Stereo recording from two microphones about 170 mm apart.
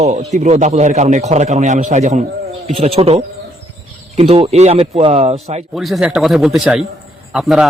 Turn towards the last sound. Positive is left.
turn(degrees=0)  # may be behind; listen again after turning